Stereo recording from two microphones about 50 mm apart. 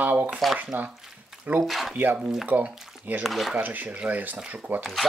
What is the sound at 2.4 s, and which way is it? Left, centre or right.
Speech, right.